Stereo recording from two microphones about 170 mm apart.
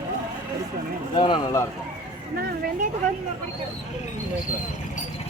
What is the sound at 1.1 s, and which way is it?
Speech, 25° left (ahead or behind).